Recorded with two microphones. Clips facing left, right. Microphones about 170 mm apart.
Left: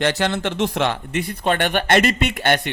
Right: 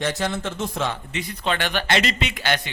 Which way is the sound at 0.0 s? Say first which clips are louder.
Left 5 dB; 75° left (ahead or behind).